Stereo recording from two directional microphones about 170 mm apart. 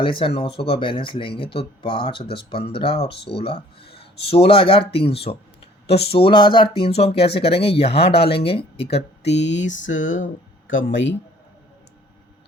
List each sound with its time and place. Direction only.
0.0 s speech: 30° left (ahead or behind)
9.0 s speech: 90° left